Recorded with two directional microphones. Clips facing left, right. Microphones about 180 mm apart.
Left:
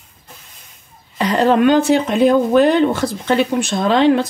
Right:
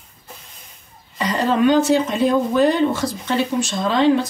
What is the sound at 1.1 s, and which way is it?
Speech, 65° left (ahead or behind).